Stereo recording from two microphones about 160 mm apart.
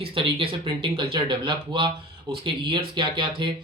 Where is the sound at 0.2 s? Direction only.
35° right (ahead or behind).